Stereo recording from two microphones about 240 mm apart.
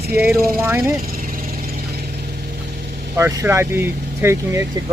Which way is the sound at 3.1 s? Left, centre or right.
Centre.